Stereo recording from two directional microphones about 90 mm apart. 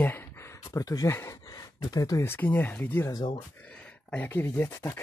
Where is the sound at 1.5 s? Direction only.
45° left (ahead or behind).